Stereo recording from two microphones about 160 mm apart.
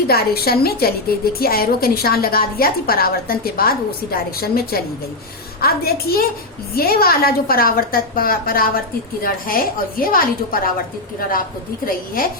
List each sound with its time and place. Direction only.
0.1 s a woman's voice: 70° left (ahead or behind)